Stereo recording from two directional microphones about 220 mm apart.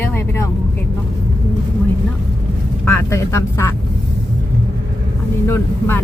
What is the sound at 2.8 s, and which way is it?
Speech, 10° left (ahead or behind).